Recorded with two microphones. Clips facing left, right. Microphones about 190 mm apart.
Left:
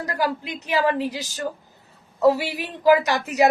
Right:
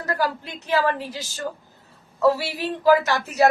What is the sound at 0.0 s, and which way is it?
A woman's voice, 15° left (ahead or behind).